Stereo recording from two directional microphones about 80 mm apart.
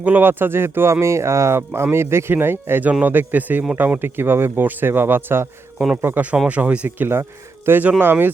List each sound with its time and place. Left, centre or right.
0.0 s speech: right